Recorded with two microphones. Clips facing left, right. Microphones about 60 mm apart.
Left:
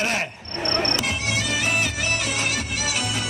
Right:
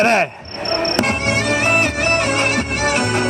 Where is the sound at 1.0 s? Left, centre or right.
Right.